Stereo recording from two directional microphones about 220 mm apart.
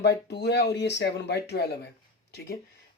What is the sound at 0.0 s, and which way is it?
Speech, 50° left (ahead or behind).